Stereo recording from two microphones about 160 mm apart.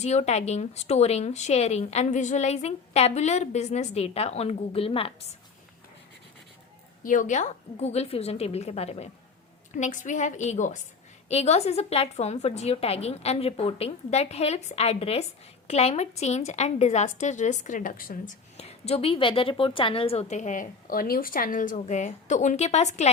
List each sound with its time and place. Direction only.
0.0 s speech: 45° left (ahead or behind)
7.0 s a woman's voice: 55° left (ahead or behind)
18.5 s speech: 40° left (ahead or behind)